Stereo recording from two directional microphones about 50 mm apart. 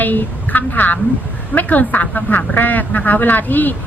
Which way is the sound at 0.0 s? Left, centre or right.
Left.